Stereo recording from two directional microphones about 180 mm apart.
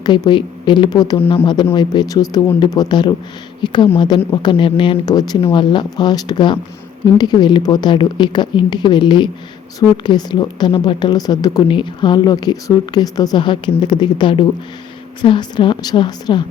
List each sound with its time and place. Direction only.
0.0 s speech: 25° left (ahead or behind)
4.5 s speech: 30° left (ahead or behind)